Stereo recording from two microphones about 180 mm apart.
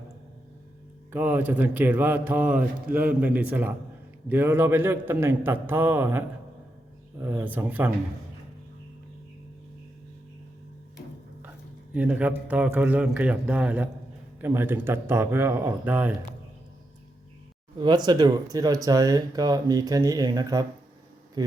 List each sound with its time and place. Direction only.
1.1 s a man's voice: 10° right (ahead or behind)
11.9 s a man's voice: 10° right (ahead or behind)
17.7 s speech: 25° right (ahead or behind)